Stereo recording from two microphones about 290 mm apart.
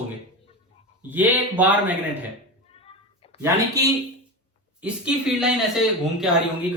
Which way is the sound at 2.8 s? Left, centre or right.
Centre.